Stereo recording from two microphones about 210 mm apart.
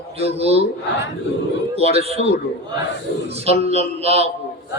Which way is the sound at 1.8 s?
30° right (ahead or behind).